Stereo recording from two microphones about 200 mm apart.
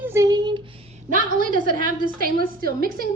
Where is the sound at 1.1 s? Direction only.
40° right (ahead or behind).